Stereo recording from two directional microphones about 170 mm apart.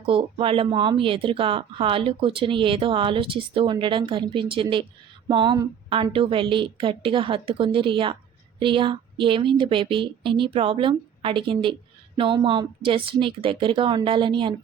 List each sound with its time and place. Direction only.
0.0 s a woman's voice: 35° right (ahead or behind)